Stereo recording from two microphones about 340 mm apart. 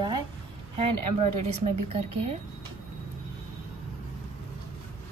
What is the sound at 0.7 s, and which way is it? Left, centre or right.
Speech, centre.